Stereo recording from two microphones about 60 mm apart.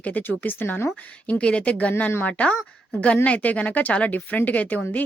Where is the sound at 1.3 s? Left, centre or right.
Centre.